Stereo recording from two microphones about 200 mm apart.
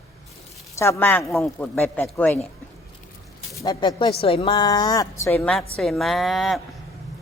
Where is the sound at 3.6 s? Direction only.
20° left (ahead or behind); by 6.6 s centre (ahead or behind).